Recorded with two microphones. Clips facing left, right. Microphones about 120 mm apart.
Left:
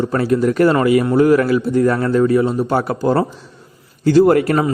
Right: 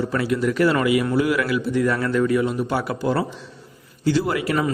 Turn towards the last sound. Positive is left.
turn(degrees=50)  # may be behind; listen again after turning